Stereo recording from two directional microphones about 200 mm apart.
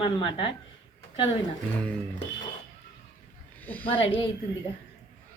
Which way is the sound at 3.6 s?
10° left (ahead or behind).